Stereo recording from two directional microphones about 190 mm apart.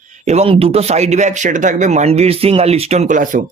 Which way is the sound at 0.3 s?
30° right (ahead or behind).